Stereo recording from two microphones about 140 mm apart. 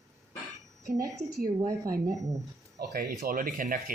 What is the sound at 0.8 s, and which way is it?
A woman's voice, 25° right (ahead or behind).